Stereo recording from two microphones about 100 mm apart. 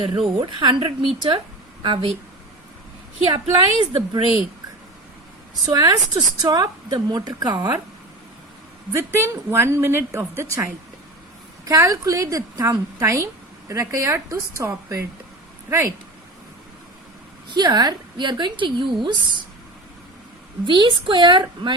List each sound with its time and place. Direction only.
0.2 s a woman's voice: 55° right (ahead or behind)
3.3 s a woman's voice: 50° right (ahead or behind)
5.7 s a woman's voice: 40° right (ahead or behind)
8.9 s a woman's voice: 25° right (ahead or behind)
17.5 s a woman's voice: 45° right (ahead or behind)
20.7 s a woman's voice: 50° right (ahead or behind)